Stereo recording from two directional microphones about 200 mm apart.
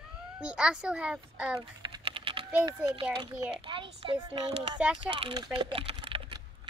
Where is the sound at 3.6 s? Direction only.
25° right (ahead or behind).